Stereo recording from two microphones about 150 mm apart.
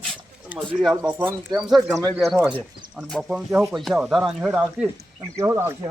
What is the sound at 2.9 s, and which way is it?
Speech, centre (ahead or behind).